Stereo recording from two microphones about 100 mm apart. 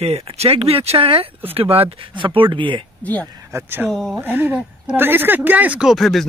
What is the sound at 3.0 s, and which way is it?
Speech, 15° left (ahead or behind).